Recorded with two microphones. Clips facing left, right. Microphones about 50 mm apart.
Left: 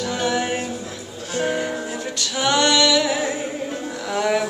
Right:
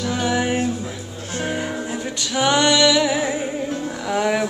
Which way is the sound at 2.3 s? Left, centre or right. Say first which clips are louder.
Right 1 dB; centre.